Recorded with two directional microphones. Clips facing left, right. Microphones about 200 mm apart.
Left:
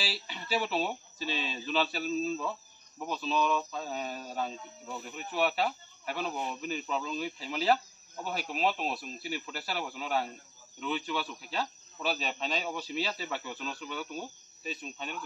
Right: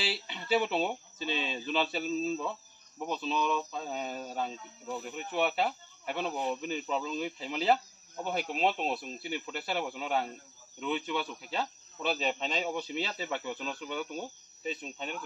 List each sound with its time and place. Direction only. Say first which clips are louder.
0.1 s speech: right 4 dB; 20° right (ahead or behind)